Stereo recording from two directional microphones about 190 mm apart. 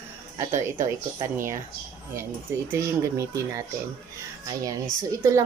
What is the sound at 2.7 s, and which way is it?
Speech, 15° right (ahead or behind).